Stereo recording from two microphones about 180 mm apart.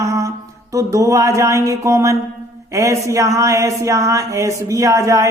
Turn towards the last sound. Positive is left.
turn(degrees=-20)  # may be behind; listen again after turning